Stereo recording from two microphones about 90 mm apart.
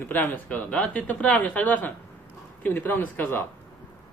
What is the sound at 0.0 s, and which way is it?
A man's voice, 20° left (ahead or behind).